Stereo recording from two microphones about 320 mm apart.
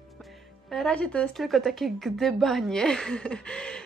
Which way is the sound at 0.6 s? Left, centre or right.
Centre.